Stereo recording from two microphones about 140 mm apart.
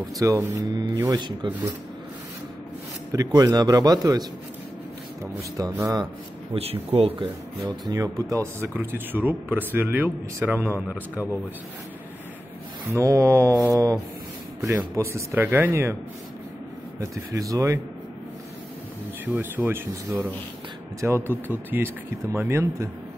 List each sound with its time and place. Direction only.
0.2 s speech: 20° right (ahead or behind)
1.1 s rub: 35° right (ahead or behind)
3.3 s speech: 30° right (ahead or behind)
5.6 s speech: 25° right (ahead or behind)
6.5 s speech: 45° right (ahead or behind)
7.9 s speech: 25° right (ahead or behind)
12.9 s speech: 20° right (ahead or behind)
17.0 s speech: 25° right (ahead or behind)
19.2 s speech: 15° right (ahead or behind)